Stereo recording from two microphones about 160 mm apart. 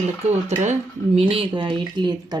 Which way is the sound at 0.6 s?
45° right (ahead or behind).